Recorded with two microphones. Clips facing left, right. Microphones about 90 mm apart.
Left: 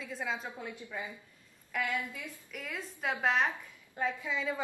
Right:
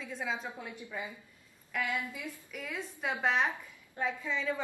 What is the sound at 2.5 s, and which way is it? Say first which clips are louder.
Speech: even; centre (ahead or behind).